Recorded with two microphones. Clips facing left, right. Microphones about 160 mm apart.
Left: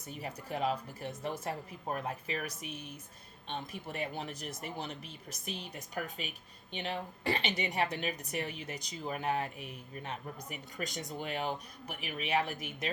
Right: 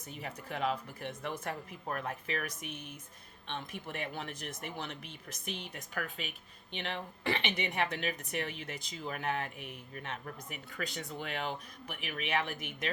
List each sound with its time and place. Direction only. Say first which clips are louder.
0.1 s speech: left 2 dB; 40° left (ahead or behind)